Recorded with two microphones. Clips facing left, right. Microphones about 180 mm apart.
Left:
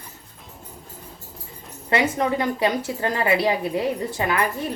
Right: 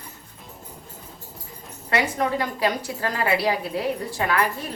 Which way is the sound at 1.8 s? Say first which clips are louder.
Left 2 dB; 25° left (ahead or behind).